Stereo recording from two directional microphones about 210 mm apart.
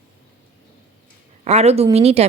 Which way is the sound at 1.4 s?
30° right (ahead or behind).